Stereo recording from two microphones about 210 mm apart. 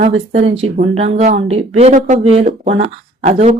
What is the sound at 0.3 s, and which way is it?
Speech, 30° right (ahead or behind).